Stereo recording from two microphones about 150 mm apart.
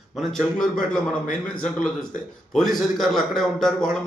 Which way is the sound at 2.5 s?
Centre (ahead or behind).